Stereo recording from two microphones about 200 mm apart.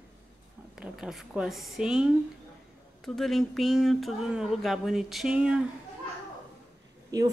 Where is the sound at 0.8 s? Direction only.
Centre (ahead or behind).